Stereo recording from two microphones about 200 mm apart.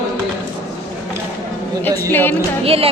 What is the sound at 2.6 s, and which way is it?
Music, 30° right (ahead or behind).